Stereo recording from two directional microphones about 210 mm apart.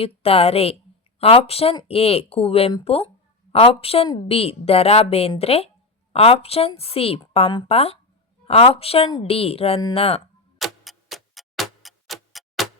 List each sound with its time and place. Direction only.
0.0 s a woman's voice: 30° left (ahead or behind)
10.6 s tick-tock: centre (ahead or behind)